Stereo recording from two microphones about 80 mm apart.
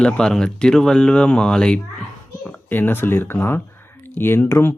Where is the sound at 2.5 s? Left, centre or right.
Left.